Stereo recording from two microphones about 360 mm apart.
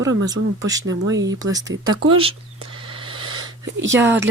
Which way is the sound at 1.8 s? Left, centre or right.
Right.